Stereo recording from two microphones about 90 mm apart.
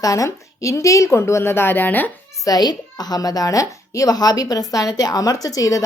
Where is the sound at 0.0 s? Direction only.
40° left (ahead or behind); by 2.1 s 20° left (ahead or behind).